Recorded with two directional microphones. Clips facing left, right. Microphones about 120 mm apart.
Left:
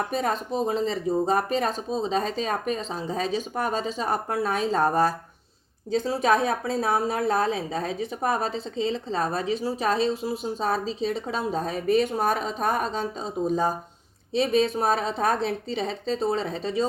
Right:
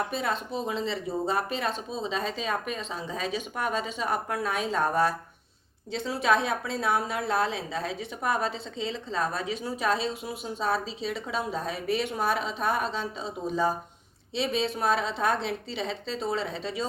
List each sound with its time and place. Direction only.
0.1 s a woman's voice: 45° left (ahead or behind)